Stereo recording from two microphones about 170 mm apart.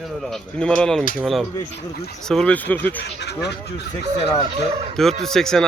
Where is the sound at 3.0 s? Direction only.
80° left.